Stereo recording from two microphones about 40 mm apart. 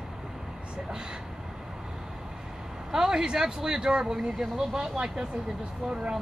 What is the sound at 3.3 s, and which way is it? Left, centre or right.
Speech, centre.